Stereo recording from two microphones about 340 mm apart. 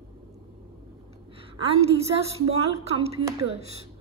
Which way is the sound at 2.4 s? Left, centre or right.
Centre.